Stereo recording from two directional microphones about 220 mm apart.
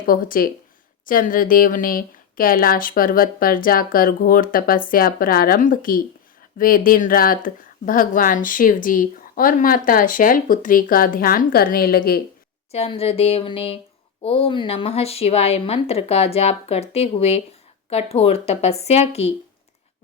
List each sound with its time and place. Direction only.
0.0 s speech: 40° left (ahead or behind)
12.7 s speech: 25° left (ahead or behind)